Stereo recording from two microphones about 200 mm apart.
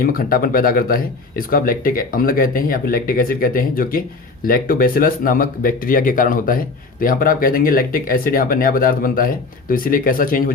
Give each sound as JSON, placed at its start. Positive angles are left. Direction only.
{"t": 0.0, "sound": "speech", "side_deg": 45}